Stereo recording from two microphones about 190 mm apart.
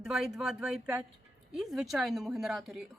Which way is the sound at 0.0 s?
5° right (ahead or behind).